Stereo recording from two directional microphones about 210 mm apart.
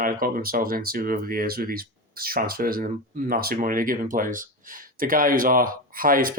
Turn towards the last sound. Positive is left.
turn(degrees=-40)  # may be behind; listen again after turning